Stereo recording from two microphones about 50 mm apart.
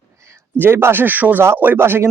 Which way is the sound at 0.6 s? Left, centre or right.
Right.